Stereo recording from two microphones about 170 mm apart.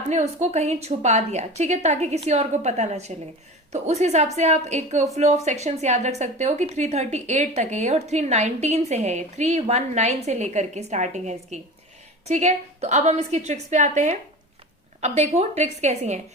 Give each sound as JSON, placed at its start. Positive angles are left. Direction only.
{"t": 0.1, "sound": "a woman's voice", "side_deg": -45}